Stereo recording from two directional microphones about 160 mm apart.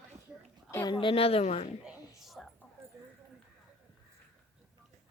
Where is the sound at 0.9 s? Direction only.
35° left (ahead or behind).